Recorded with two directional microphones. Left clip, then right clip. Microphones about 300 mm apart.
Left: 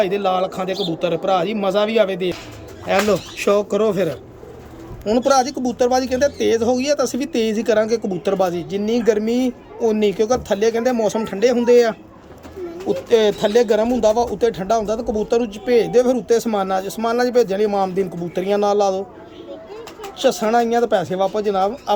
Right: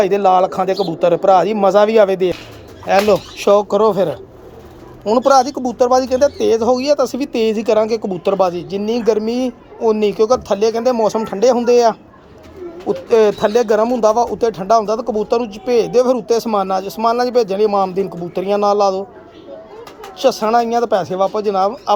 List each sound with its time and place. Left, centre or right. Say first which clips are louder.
0.0 s a man's voice: right 6 dB; centre
2.8 s speech: right 5 dB; centre
13.1 s speech: right 4 dB; centre
14.0 s speech: right 3 dB; right
14.5 s speech: right 5 dB; centre
20.1 s speech: right 3 dB; centre